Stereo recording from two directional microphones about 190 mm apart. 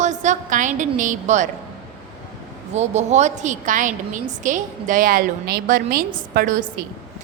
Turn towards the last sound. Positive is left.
turn(degrees=-45)  # may be behind; listen again after turning